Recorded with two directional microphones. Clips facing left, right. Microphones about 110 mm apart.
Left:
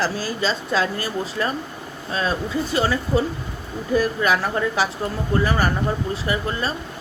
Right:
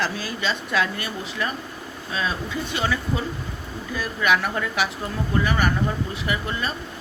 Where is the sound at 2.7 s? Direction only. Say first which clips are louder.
Left 5 dB; 35° left (ahead or behind).